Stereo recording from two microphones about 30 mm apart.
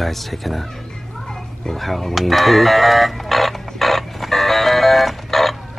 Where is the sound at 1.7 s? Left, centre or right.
Centre.